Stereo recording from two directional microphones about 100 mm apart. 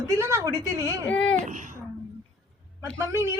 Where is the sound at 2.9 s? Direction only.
30° right (ahead or behind).